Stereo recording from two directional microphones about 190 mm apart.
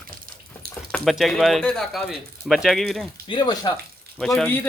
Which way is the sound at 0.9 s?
Centre (ahead or behind).